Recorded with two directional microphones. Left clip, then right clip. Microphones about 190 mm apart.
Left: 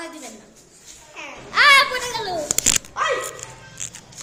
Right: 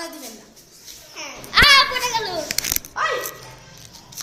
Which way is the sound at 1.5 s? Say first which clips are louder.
Right 1 dB; 5° left (ahead or behind).